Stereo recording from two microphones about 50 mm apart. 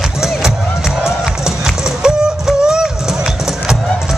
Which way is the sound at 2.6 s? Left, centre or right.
Centre.